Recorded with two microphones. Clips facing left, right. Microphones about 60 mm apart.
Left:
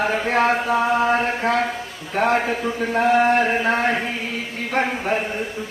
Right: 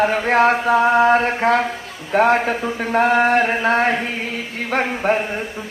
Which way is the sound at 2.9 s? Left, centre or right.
Right.